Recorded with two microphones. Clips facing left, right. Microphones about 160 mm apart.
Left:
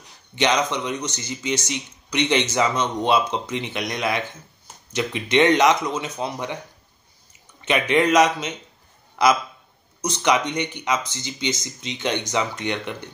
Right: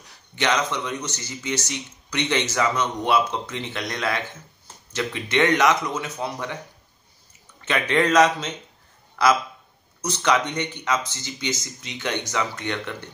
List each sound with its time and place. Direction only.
0.4 s speech: 20° left (ahead or behind)
7.6 s speech: 15° left (ahead or behind)